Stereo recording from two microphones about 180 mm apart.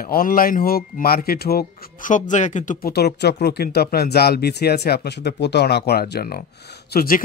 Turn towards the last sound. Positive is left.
turn(degrees=55)  # may be behind; listen again after turning